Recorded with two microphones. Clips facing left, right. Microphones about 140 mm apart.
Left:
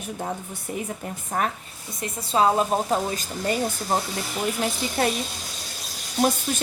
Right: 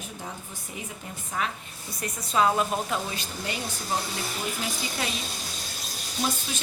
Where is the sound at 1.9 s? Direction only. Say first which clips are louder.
Left 3 dB; 25° left (ahead or behind).